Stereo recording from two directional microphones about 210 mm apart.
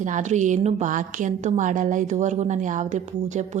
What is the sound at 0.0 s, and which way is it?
A woman's voice, 35° right (ahead or behind).